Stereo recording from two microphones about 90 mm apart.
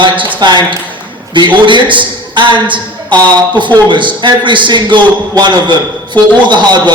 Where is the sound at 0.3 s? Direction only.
55° right (ahead or behind).